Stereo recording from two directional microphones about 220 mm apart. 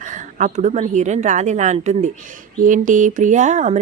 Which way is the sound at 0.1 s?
35° right (ahead or behind).